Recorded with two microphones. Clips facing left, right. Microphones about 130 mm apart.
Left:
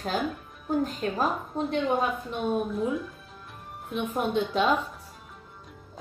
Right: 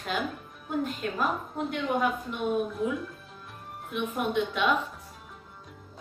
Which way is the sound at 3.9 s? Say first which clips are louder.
Left 1 dB; 35° left (ahead or behind).